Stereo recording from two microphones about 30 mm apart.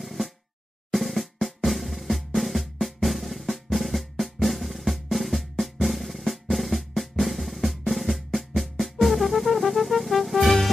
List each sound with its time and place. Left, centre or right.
0.0 s music: centre
0.9 s drum: centre
8.8 s music: centre